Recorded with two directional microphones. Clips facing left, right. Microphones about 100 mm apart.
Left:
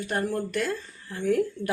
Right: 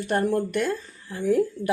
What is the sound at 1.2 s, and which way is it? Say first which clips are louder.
Speech: right 2 dB; 10° right (ahead or behind).